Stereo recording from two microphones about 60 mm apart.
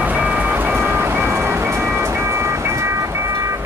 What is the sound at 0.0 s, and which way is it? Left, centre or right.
Vehicle, right.